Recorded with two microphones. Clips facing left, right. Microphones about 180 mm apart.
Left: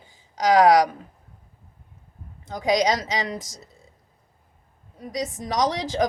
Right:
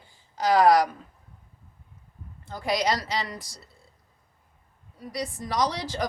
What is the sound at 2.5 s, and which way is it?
Speech, 20° left (ahead or behind).